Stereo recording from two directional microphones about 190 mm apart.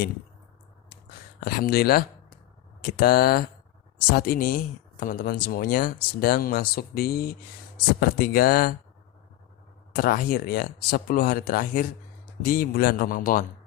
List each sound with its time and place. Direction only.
1.4 s speech: 55° left (ahead or behind)
9.9 s speech: 50° left (ahead or behind)